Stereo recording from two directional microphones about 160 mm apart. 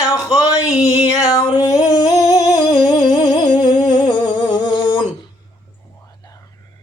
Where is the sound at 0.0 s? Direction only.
20° left (ahead or behind).